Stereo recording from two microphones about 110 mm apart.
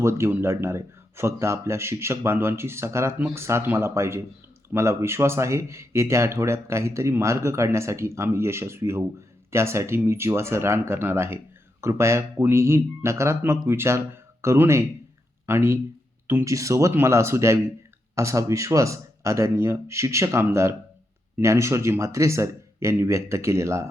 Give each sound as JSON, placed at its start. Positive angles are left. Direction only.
{"t": 0.0, "sound": "a man's voice", "side_deg": -25}